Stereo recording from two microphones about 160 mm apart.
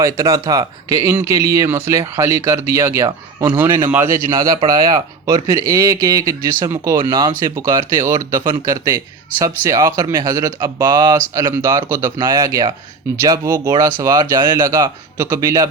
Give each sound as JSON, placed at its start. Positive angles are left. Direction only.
{"t": 0.0, "sound": "speech", "side_deg": -20}
{"t": 4.3, "sound": "speech", "side_deg": -25}
{"t": 7.0, "sound": "speech", "side_deg": -30}